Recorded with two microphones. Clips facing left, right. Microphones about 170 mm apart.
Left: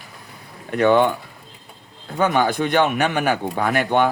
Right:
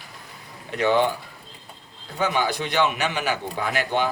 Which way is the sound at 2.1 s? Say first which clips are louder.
Left 5 dB; 50° left (ahead or behind).